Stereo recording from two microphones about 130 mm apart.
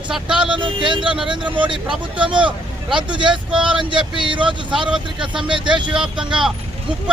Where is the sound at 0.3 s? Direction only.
40° right (ahead or behind).